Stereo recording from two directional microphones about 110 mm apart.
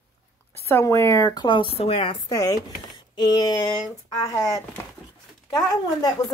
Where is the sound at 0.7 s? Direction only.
25° left (ahead or behind); by 2.1 s 60° left (ahead or behind).